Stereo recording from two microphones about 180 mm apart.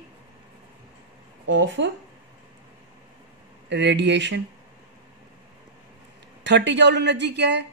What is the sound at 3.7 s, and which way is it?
Speech, 75° right (ahead or behind).